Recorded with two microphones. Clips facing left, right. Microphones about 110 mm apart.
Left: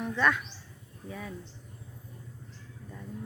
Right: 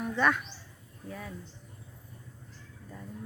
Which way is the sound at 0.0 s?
10° right (ahead or behind).